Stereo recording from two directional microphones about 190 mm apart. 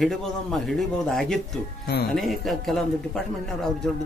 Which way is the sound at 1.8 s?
55° left (ahead or behind).